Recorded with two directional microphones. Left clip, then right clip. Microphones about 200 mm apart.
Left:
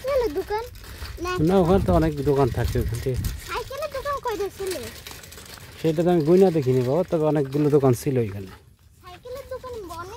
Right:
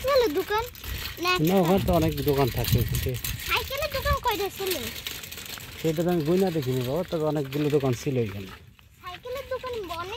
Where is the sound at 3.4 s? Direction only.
25° right (ahead or behind).